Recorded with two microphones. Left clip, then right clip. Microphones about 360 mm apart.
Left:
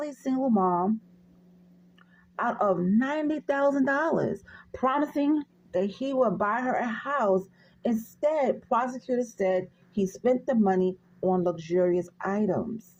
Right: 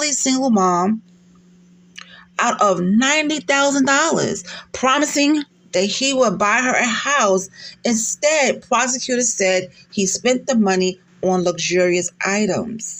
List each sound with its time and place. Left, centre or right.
0.0 s speech: left
2.0 s speech: left
11.3 s speech: left